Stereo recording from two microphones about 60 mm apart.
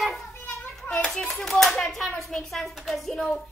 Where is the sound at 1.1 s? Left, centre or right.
Centre.